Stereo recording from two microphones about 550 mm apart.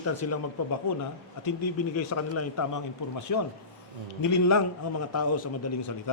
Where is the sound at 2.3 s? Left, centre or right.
Left.